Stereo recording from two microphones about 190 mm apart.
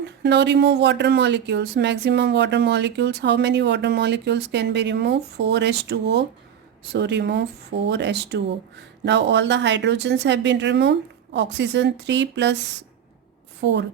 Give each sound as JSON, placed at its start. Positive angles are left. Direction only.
{"t": 0.0, "sound": "speech", "side_deg": -65}
{"t": 13.6, "sound": "speech", "side_deg": -70}